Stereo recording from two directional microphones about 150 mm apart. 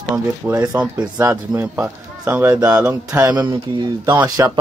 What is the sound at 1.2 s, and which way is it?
Speech, 15° right (ahead or behind).